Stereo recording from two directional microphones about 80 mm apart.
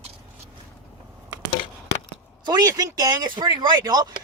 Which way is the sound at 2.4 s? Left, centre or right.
Right.